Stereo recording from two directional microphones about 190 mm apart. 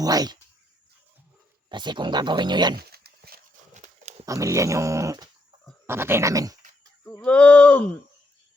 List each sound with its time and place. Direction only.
0.0 s speech: 20° right (ahead or behind)
1.7 s speech: 25° right (ahead or behind)
2.7 s a sound: 55° right (ahead or behind)
4.3 s speech: 15° right (ahead or behind)
7.2 s speech: 5° left (ahead or behind)